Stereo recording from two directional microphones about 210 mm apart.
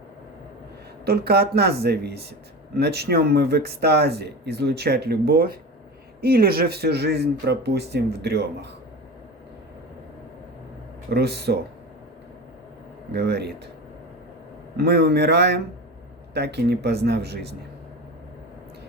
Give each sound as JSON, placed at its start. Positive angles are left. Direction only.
{"t": 1.0, "sound": "speech", "side_deg": -50}
{"t": 11.1, "sound": "speech", "side_deg": -50}
{"t": 13.1, "sound": "speech", "side_deg": -50}
{"t": 14.8, "sound": "speech", "side_deg": -50}